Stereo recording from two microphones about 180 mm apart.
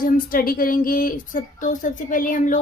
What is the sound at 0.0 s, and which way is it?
Speech, 55° left (ahead or behind).